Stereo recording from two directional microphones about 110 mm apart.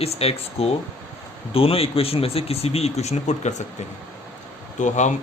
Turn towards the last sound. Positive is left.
turn(degrees=90)